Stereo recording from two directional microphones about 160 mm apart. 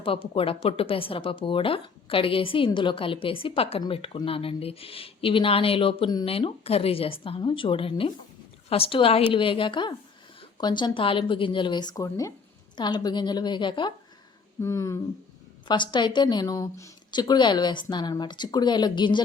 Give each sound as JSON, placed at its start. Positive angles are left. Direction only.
{"t": 0.0, "sound": "speech", "side_deg": 35}
{"t": 14.6, "sound": "a sound", "side_deg": 20}
{"t": 15.6, "sound": "speech", "side_deg": 30}